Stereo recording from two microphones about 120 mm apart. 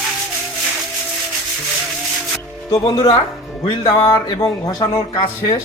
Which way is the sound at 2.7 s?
35° left (ahead or behind).